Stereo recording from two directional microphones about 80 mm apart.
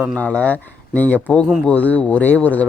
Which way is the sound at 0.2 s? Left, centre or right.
Centre.